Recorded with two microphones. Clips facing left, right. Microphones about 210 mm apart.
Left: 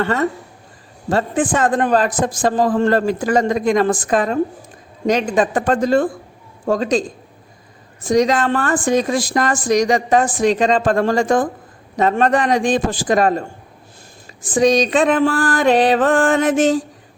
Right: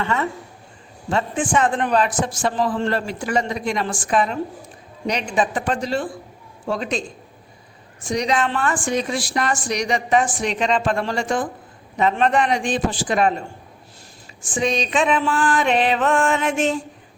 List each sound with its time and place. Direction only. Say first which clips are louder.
0.0 s a man's voice: left 5 dB; 45° left (ahead or behind)
1.5 s a man's voice: left 2 dB; 40° left (ahead or behind)
8.0 s a man's voice: left 6 dB; 45° left (ahead or behind)